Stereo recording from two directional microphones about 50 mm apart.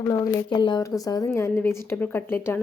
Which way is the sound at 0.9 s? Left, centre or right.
Left.